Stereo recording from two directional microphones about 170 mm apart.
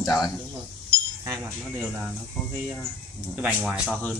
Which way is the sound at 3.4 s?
5° right (ahead or behind).